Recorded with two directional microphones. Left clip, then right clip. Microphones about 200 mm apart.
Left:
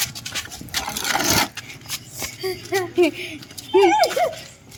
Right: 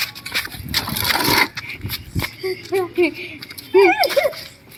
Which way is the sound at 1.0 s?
20° right (ahead or behind).